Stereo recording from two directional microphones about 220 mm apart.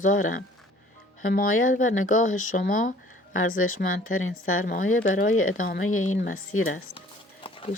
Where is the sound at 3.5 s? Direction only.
70° left (ahead or behind).